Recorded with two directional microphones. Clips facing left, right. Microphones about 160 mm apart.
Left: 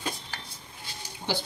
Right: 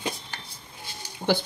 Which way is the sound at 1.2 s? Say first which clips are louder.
Right 7 dB; 75° right (ahead or behind).